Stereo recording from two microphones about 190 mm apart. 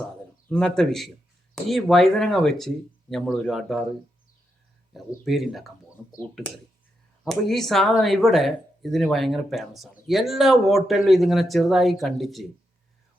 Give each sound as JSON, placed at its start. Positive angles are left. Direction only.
{"t": 0.4, "sound": "a man's voice", "side_deg": 10}
{"t": 4.9, "sound": "speech", "side_deg": 0}
{"t": 7.3, "sound": "speech", "side_deg": 0}